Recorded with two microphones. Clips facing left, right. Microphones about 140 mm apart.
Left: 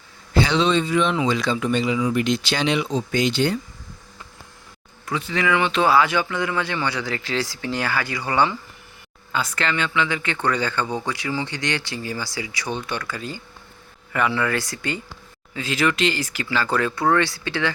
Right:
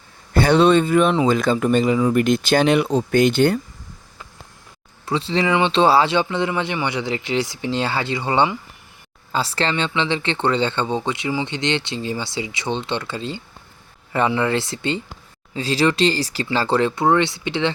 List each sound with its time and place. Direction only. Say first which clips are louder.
0.3 s speech: right 5 dB; 55° right (ahead or behind)
5.0 s speech: right 3 dB; 30° right (ahead or behind)